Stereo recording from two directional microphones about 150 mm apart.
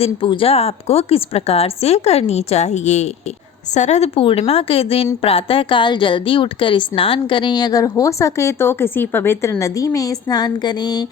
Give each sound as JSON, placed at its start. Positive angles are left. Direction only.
{"t": 0.0, "sound": "a woman's voice", "side_deg": 35}